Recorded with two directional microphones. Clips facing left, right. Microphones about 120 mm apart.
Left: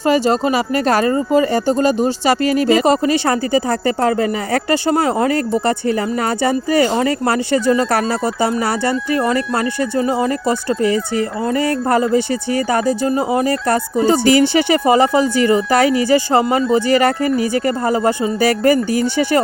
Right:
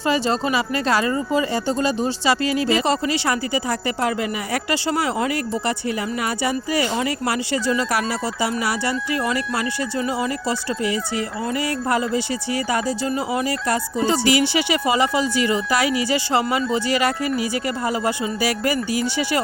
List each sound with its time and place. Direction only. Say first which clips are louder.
0.0 s speech: left 6 dB; 45° left (ahead or behind)
7.9 s speech: left 6 dB; 55° left (ahead or behind)
9.1 s speech: left 6 dB; 35° left (ahead or behind)
10.4 s speech: left 6 dB; 50° left (ahead or behind)
10.8 s speech: left 7 dB; 20° right (ahead or behind)
11.6 s speech: left 6 dB; 45° left (ahead or behind)
13.1 s speech: left 6 dB; 40° left (ahead or behind)